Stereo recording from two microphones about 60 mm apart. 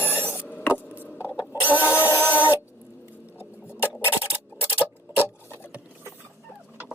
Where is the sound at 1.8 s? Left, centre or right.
Left.